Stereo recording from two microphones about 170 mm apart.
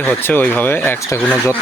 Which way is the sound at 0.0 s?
10° left (ahead or behind).